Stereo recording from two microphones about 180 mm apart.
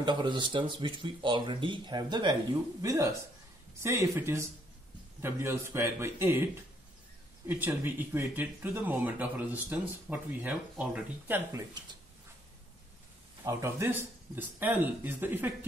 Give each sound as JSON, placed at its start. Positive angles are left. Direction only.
{"t": 0.0, "sound": "speech", "side_deg": -25}
{"t": 13.4, "sound": "speech", "side_deg": -15}